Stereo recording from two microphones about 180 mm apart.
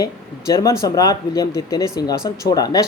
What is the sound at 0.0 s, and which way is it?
Speech, 20° left (ahead or behind).